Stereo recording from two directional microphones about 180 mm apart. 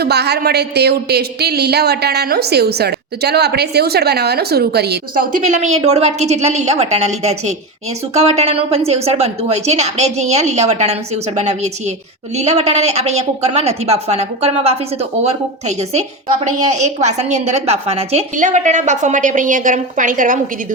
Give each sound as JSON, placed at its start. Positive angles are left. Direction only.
{"t": 0.0, "sound": "speech", "side_deg": -65}
{"t": 5.5, "sound": "a woman's voice", "side_deg": -40}